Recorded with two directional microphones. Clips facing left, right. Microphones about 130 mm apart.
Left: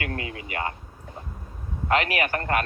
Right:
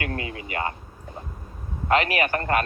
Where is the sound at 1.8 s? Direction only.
30° right (ahead or behind).